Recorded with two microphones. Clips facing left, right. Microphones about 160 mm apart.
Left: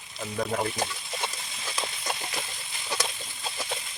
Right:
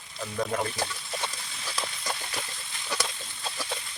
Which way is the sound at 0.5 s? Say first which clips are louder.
Left 1 dB; 15° left (ahead or behind).